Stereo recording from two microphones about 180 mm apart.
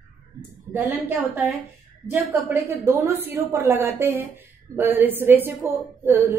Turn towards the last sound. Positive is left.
turn(degrees=-15)  # may be behind; listen again after turning